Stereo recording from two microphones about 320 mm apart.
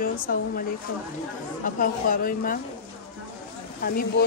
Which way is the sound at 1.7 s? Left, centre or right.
Left.